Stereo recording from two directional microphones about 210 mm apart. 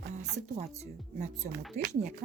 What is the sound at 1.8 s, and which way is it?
Speech, 35° right (ahead or behind).